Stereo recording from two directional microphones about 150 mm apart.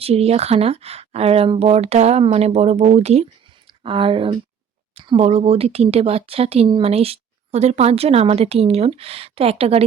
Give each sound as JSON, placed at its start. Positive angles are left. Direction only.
{"t": 0.0, "sound": "speech", "side_deg": -40}
{"t": 3.7, "sound": "speech", "side_deg": -35}